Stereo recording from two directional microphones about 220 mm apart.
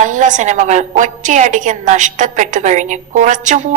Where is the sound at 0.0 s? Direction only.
35° right (ahead or behind).